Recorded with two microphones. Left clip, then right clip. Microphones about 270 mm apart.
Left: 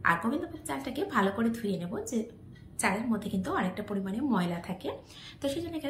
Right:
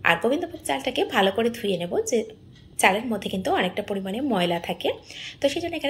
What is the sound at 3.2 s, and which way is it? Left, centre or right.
A woman's voice, centre.